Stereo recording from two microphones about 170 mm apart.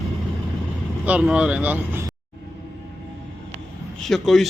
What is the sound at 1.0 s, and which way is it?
Speech, 5° right (ahead or behind).